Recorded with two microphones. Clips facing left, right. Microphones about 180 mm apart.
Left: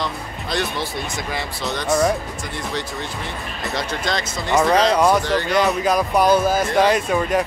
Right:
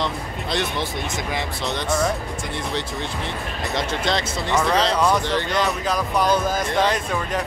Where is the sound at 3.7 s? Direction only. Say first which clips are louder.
Right 1 dB; 25° right (ahead or behind).